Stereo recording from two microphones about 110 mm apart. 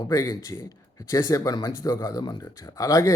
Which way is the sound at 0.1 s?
35° left (ahead or behind).